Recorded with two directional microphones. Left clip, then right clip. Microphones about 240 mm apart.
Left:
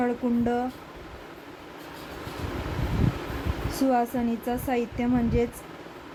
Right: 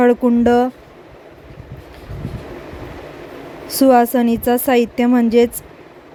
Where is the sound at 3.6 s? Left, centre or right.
Right.